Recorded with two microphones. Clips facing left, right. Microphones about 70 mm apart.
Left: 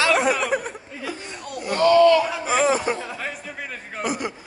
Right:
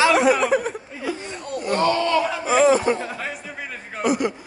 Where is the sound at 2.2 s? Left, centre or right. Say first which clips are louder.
Right 3 dB; centre.